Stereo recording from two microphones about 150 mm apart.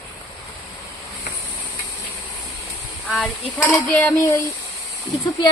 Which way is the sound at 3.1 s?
5° left (ahead or behind).